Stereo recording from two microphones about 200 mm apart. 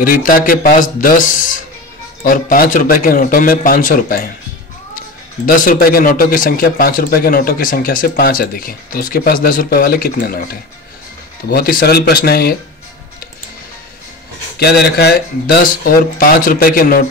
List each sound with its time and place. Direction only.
0.0 s a man's voice: 45° left (ahead or behind)
5.5 s a man's voice: 45° left (ahead or behind)
14.6 s a man's voice: 55° left (ahead or behind)